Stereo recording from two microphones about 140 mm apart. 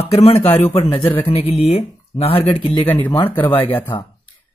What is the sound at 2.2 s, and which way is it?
Speech, 45° left (ahead or behind).